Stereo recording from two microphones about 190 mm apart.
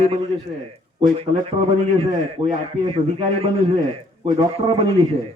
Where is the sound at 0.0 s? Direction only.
30° right (ahead or behind).